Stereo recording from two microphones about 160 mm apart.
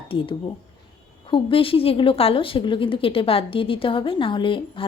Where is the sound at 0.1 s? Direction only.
35° left (ahead or behind).